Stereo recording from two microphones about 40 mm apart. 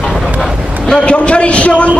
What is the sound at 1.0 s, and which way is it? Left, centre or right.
Speech, left.